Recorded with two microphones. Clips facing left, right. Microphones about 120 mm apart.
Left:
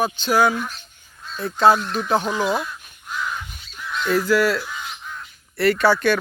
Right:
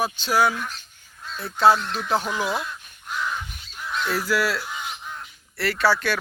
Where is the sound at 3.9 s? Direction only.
5° right (ahead or behind).